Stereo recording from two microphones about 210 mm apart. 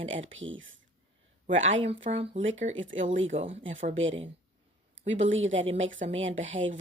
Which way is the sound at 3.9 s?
65° right (ahead or behind).